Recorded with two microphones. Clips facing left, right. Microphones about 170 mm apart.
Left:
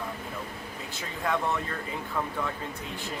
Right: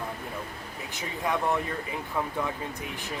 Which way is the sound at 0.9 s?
15° right (ahead or behind).